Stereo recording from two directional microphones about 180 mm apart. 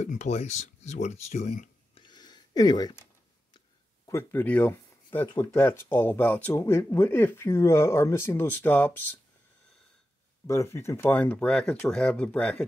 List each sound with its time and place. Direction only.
0.0 s speech: 40° left (ahead or behind)
2.0 s a sound: 25° left (ahead or behind)
5.3 s speech: 15° left (ahead or behind)
10.4 s speech: 15° left (ahead or behind)